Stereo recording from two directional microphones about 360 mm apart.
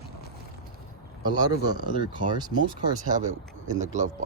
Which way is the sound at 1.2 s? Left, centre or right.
Centre.